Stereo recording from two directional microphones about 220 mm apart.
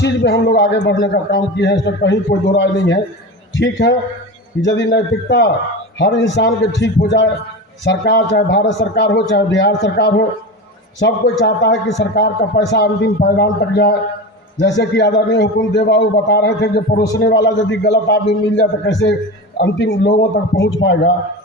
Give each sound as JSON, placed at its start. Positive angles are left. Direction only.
{"t": 0.0, "sound": "a man's voice", "side_deg": 50}